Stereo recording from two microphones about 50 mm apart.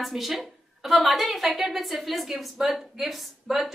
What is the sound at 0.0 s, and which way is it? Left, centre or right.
A woman's voice, centre.